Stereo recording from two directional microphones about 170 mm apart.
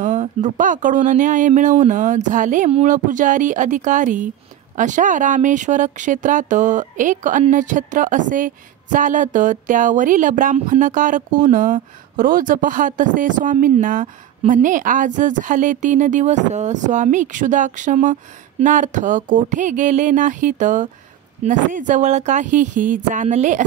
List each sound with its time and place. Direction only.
0.0 s speech: 45° right (ahead or behind)